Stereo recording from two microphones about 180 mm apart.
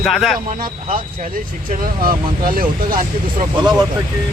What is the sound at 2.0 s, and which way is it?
Speech, 55° right (ahead or behind).